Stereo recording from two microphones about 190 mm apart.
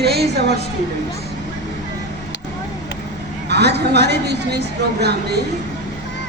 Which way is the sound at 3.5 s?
60° right (ahead or behind).